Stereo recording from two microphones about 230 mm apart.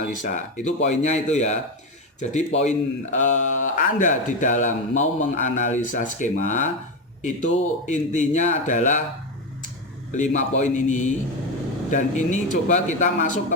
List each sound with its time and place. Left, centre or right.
0.2 s a man's voice: left
10.2 s a man's voice: left